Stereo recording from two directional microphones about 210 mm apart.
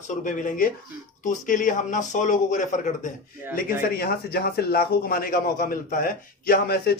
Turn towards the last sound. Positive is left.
turn(degrees=50)  # may be behind; listen again after turning